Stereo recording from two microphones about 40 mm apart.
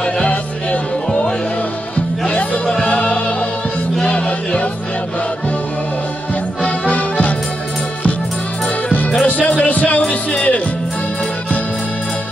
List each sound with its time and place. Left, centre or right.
0.3 s music: left
2.2 s music: left
6.9 s music: left
9.2 s music: left